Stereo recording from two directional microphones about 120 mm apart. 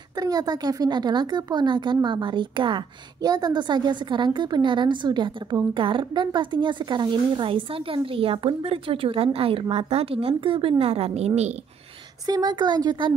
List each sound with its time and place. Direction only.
0.2 s a woman's voice: 35° right (ahead or behind); by 11.5 s 65° right (ahead or behind)
12.3 s speech: 35° right (ahead or behind)